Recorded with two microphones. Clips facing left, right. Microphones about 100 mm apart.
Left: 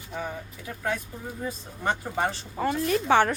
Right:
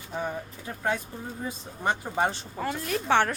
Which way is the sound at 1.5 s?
20° right (ahead or behind).